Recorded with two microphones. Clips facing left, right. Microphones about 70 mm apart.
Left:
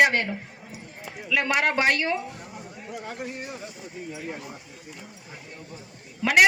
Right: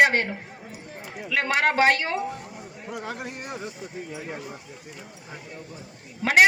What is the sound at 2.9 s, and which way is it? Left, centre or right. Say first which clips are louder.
Speech: right 2 dB; right.